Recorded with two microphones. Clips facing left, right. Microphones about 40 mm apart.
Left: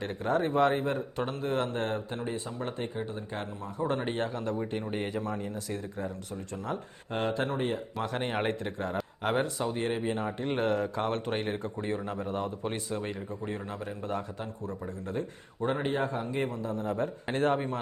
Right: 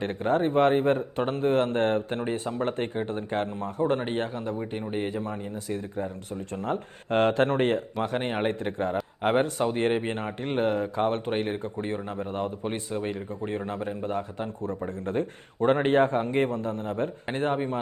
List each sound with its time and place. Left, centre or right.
0.0 s speech: right
4.8 s speech: centre
5.1 s speech: right
6.5 s speech: right
8.0 s speech: right
9.2 s speech: right
10.6 s speech: right
12.9 s speech: centre
13.5 s speech: right
14.6 s speech: right
17.2 s speech: centre